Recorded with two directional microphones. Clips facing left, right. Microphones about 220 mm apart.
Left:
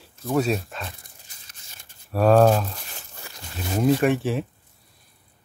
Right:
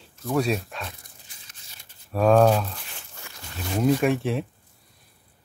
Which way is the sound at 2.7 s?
40° left (ahead or behind).